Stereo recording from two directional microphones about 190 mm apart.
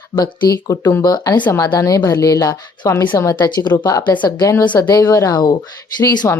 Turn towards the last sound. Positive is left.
turn(degrees=20)  # may be behind; listen again after turning